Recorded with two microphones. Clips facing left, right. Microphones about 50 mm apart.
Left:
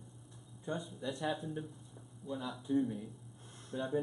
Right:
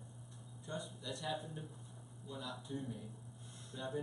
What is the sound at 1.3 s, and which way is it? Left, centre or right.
Speech, centre.